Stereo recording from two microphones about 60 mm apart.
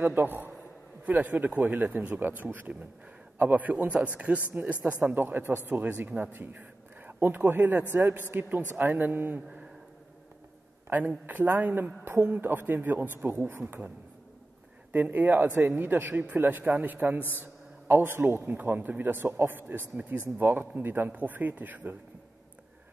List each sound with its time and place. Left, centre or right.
0.0 s a man's voice: right
10.9 s a man's voice: right
16.6 s a man's voice: right